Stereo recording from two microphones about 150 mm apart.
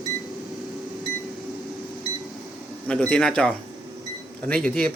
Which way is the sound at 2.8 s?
5° left (ahead or behind).